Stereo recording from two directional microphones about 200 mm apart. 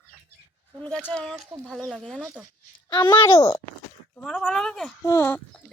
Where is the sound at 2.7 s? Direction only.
20° left (ahead or behind).